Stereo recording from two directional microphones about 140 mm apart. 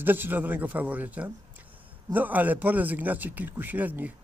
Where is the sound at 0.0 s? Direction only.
15° right (ahead or behind).